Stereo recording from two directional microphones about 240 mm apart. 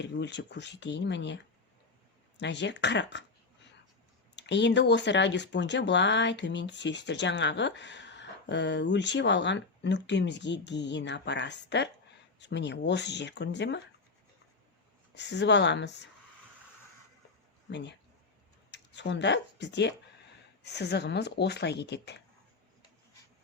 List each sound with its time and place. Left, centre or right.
0.0 s speech: left
2.4 s speech: left
4.4 s speech: left
15.1 s speech: left
17.7 s speech: left